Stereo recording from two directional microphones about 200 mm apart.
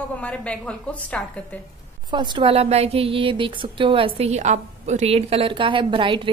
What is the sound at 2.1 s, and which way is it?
A woman's voice, 25° right (ahead or behind).